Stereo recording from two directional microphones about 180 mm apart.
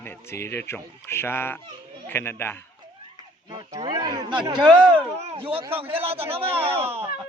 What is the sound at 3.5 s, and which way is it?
Speech, 25° right (ahead or behind).